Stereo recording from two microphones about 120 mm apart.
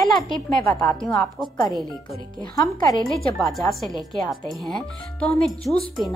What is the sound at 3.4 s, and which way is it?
Speech, centre (ahead or behind).